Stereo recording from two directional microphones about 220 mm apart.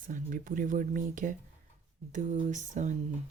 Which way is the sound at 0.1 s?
40° right (ahead or behind).